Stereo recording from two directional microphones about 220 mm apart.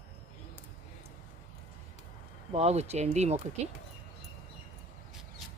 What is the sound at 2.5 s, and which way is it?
Speech, 30° right (ahead or behind).